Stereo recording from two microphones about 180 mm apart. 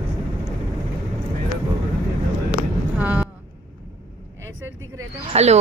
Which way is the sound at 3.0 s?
10° right (ahead or behind).